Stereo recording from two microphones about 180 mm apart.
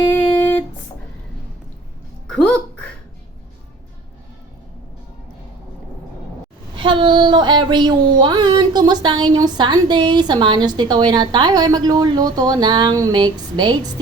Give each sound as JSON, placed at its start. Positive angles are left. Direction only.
{"t": 0.1, "sound": "music", "side_deg": 10}
{"t": 2.2, "sound": "a sound", "side_deg": 5}
{"t": 6.7, "sound": "speech", "side_deg": -25}